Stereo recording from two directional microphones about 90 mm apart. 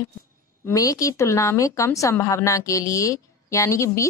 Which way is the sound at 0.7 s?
40° left (ahead or behind).